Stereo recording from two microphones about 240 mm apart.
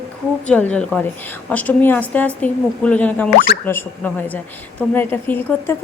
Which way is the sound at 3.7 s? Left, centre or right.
Centre.